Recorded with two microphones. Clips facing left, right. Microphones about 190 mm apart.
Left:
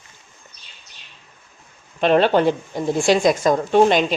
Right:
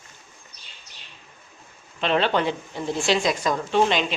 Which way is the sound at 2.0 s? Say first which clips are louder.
Left 7 dB; 45° left (ahead or behind).